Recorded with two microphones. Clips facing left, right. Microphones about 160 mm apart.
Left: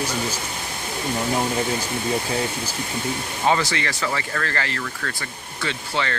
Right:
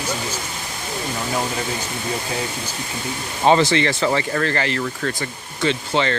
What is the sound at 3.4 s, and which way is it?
Speech, 25° right (ahead or behind).